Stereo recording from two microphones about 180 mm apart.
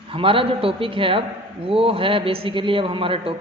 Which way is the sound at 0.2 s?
30° right (ahead or behind).